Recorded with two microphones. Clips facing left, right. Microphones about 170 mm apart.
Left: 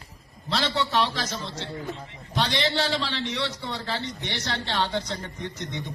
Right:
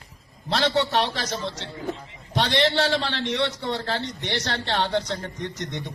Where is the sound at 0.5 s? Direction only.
65° right (ahead or behind).